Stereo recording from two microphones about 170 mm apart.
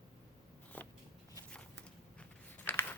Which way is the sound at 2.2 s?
10° left (ahead or behind).